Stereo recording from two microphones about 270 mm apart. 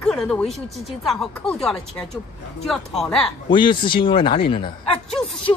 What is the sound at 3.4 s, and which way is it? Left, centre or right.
A woman's voice, centre.